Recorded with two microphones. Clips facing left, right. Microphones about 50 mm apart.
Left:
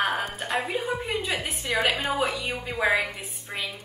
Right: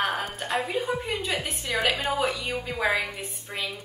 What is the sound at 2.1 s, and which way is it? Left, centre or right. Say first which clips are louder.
Speech: even; centre.